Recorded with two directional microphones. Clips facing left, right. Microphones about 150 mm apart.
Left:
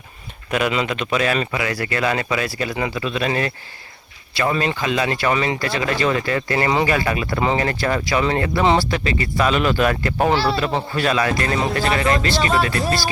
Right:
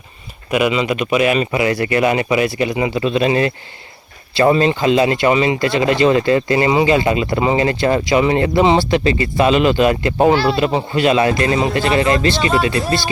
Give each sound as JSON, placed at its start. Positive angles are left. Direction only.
{"t": 0.5, "sound": "speech", "side_deg": -5}
{"t": 3.0, "sound": "speech", "side_deg": -30}